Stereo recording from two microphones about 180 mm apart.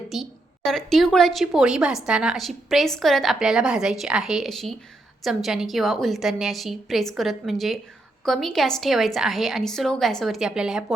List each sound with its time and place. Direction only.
0.1 s a woman's voice: centre (ahead or behind)